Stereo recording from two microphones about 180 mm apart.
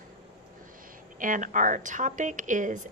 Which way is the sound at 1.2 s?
45° right (ahead or behind).